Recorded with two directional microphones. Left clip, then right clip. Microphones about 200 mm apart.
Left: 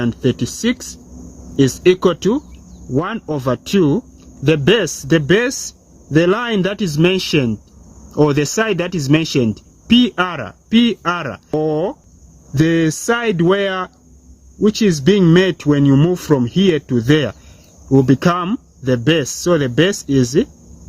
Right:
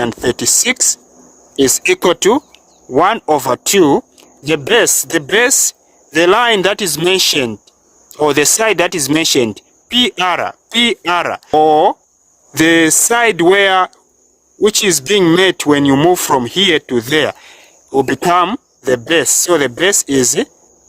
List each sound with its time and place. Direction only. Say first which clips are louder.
0.0 s speech: right 4 dB; 60° right (ahead or behind)